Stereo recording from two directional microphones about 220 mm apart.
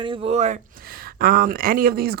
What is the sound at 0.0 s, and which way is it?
A woman's voice, 25° right (ahead or behind).